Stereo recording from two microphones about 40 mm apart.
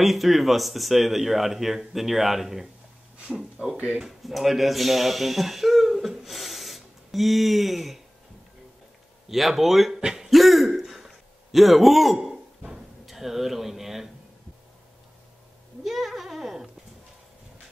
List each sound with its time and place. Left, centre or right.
0.0 s speech: centre
3.3 s speech: centre
3.7 s speech: right
4.2 s speech: centre
9.3 s speech: centre
9.9 s throat clearing: centre
10.3 s throat clearing: centre
11.5 s a sound: centre
13.0 s speech: centre
15.8 s a sound: centre